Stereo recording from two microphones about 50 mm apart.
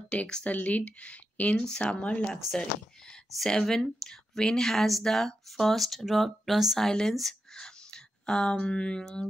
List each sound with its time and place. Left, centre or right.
0.1 s speech: left
3.4 s speech: centre
6.9 s speech: centre
7.5 s a sound: centre
8.6 s speech: centre